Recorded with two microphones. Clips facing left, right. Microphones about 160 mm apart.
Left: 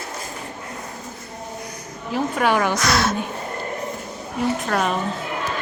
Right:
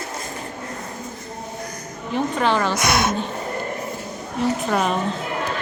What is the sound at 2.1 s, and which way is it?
Speech, 10° left (ahead or behind).